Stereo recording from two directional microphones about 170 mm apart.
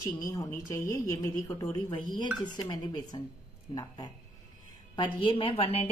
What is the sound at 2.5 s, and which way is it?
Speech, 25° left (ahead or behind).